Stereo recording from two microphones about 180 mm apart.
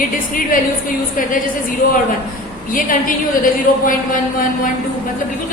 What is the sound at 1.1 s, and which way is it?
Speech, 50° left (ahead or behind).